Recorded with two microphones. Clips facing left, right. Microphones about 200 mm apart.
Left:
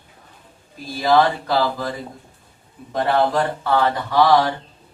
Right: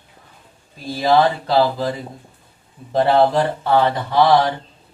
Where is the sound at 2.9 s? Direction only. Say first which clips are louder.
Right 4 dB; 25° right (ahead or behind).